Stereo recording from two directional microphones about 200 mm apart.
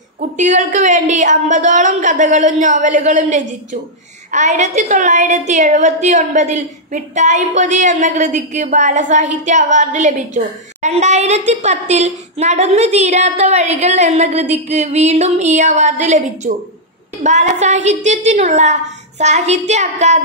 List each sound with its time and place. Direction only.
0.2 s a woman's voice: 35° right (ahead or behind)